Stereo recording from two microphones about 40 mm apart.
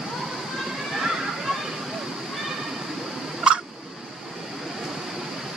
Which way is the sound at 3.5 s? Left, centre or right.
Right.